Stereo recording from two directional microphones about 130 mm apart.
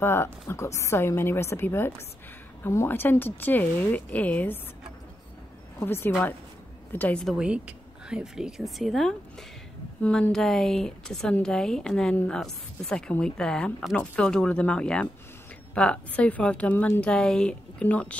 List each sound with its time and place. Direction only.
0.0 s a woman's voice: 20° left (ahead or behind)
5.8 s a woman's voice: 15° left (ahead or behind)
7.2 s a woman's voice: 5° right (ahead or behind); by 18.1 s 10° left (ahead or behind)